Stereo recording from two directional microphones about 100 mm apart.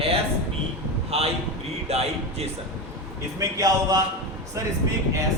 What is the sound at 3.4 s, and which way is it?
A man's voice, 35° right (ahead or behind).